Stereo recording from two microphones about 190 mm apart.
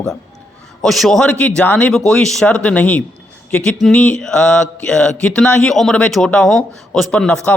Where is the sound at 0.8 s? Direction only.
Centre (ahead or behind).